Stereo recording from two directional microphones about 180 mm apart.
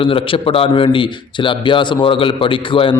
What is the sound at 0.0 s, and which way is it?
A man's voice, 30° left (ahead or behind).